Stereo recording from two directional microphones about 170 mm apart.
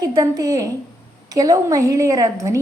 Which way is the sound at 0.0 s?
20° right (ahead or behind).